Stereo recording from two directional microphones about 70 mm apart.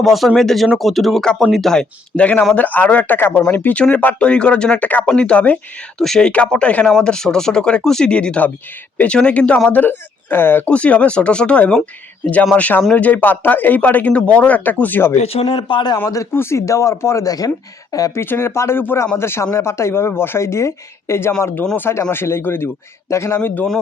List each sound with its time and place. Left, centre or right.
0.0 s speech: centre
1.2 s speech: centre
6.0 s speech: centre; by 10.6 s left
10.7 s speech: centre
15.6 s a man's voice: left
16.3 s speech: left
18.1 s speech: left